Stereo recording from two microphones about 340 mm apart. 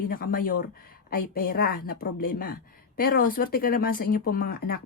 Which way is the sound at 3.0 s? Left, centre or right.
Left.